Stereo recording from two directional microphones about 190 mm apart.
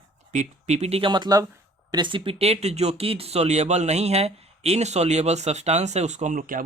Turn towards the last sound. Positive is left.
turn(degrees=-45)  # may be behind; listen again after turning